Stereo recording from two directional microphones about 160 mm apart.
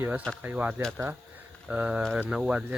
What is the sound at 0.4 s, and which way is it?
Speech, 10° right (ahead or behind).